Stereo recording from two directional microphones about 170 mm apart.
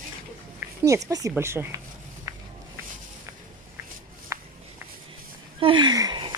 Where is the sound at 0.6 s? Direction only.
15° right (ahead or behind).